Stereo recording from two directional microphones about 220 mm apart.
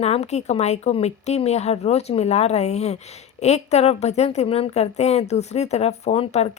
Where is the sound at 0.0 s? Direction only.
30° left (ahead or behind).